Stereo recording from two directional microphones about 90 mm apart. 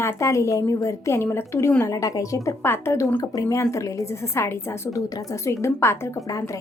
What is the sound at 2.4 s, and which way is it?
A woman's voice, 30° left (ahead or behind).